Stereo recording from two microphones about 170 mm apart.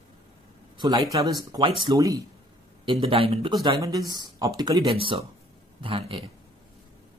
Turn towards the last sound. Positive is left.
turn(degrees=-35)  # may be behind; listen again after turning